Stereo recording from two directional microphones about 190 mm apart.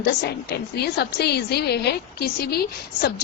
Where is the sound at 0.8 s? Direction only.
60° left (ahead or behind).